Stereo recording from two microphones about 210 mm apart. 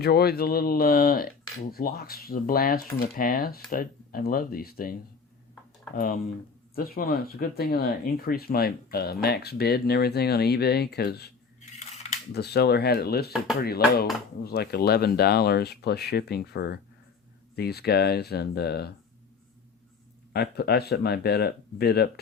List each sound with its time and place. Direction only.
0.0 s speech: 50° left (ahead or behind)
6.7 s speech: 45° left (ahead or behind)
12.3 s speech: 50° left (ahead or behind)
20.3 s speech: 50° left (ahead or behind)